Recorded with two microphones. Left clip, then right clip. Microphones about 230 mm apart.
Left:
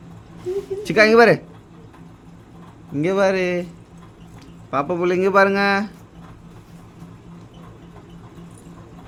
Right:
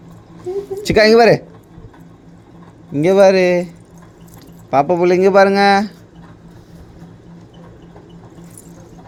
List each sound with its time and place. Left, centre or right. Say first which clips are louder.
0.8 s speech: right 3 dB; right
2.9 s speech: right 8 dB; centre
4.7 s speech: right 7 dB; right